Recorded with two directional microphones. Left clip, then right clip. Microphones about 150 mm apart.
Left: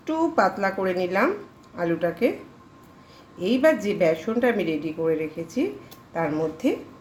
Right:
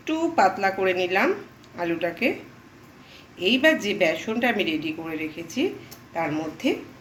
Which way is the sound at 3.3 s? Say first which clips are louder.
Even; 80° left.